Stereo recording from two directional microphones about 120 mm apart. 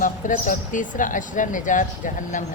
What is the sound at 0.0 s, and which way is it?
Speech, 90° left.